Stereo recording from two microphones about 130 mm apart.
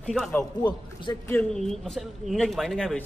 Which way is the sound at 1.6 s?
5° left (ahead or behind).